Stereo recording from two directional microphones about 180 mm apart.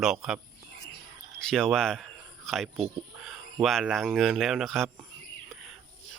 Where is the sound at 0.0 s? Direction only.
Centre (ahead or behind).